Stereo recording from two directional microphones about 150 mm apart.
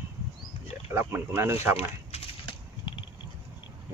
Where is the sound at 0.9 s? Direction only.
15° right (ahead or behind).